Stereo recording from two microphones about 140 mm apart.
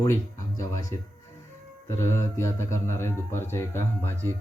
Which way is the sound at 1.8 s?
20° left (ahead or behind).